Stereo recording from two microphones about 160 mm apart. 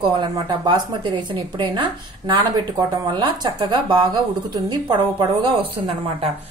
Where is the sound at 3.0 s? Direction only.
30° right (ahead or behind).